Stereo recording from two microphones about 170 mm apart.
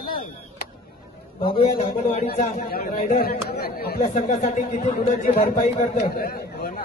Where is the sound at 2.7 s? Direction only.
65° left (ahead or behind).